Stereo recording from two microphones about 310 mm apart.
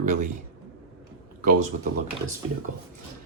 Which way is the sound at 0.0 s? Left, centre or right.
Right.